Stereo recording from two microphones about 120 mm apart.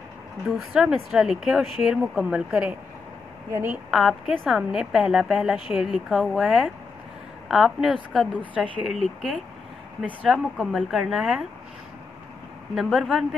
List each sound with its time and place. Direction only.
0.5 s a woman's voice: 5° right (ahead or behind)
3.9 s a woman's voice: centre (ahead or behind)
8.8 s a woman's voice: centre (ahead or behind)
12.7 s a woman's voice: 5° right (ahead or behind)